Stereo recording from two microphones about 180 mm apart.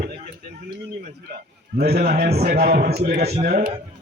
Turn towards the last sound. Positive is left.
turn(degrees=-50)  # may be behind; listen again after turning